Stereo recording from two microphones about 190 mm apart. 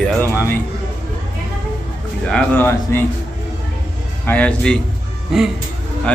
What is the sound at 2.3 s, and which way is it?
Speech, 10° left (ahead or behind).